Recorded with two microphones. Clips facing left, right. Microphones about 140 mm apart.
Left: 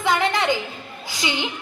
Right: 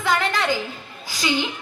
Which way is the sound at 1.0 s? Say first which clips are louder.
Right 3 dB; 20° left (ahead or behind).